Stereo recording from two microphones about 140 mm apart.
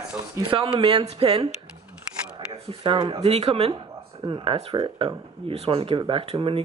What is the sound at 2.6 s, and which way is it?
Speech, 30° right (ahead or behind).